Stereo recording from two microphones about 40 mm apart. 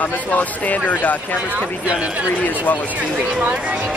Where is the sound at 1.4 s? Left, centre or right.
Right.